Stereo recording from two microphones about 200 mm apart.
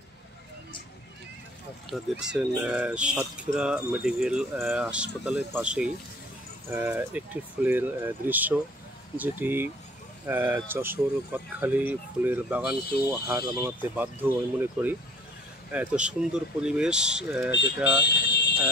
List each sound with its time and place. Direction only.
1.9 s speech: 5° right (ahead or behind)
17.5 s speech: 55° left (ahead or behind)
18.0 s fire alarm: 55° left (ahead or behind)